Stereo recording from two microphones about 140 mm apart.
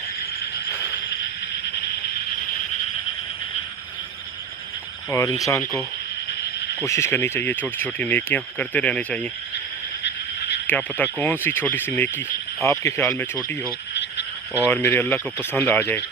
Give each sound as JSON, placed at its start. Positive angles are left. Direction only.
{"t": 5.1, "sound": "speech", "side_deg": 25}
{"t": 6.8, "sound": "speech", "side_deg": 20}
{"t": 10.7, "sound": "speech", "side_deg": 10}
{"t": 14.7, "sound": "speech", "side_deg": 15}